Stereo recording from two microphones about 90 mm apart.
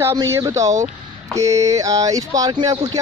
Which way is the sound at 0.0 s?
30° right (ahead or behind).